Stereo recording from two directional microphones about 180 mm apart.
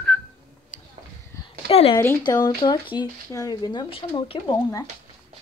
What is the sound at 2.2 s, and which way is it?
Speech, 20° left (ahead or behind).